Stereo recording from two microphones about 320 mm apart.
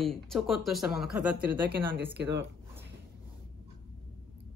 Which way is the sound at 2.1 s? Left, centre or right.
Right.